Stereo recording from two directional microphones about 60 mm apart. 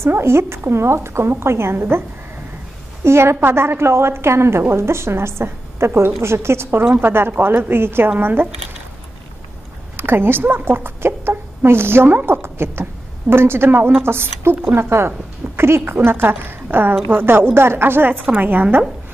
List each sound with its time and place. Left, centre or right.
0.0 s a woman's voice: right
9.9 s a woman's voice: right